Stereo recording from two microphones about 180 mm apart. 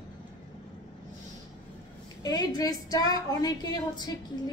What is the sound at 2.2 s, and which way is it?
A woman's voice, 20° left (ahead or behind).